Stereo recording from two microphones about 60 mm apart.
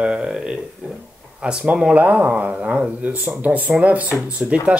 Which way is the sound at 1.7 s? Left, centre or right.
Right.